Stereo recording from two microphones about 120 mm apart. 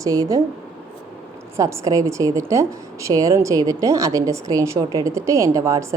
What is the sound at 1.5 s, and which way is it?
A woman's voice, 25° right (ahead or behind).